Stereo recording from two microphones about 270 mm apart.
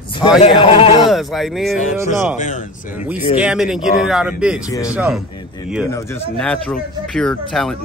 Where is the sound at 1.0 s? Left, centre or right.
Centre.